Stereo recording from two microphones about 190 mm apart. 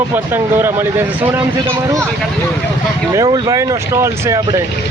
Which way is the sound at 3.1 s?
20° right (ahead or behind).